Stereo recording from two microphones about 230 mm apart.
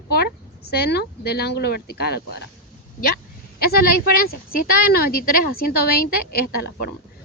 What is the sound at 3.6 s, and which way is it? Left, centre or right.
Speech, left.